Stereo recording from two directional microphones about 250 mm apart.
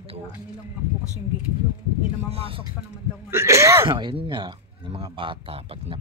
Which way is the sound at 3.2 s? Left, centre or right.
Centre.